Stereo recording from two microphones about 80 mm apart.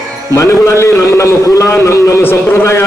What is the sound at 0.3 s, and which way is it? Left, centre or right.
A man's voice, left.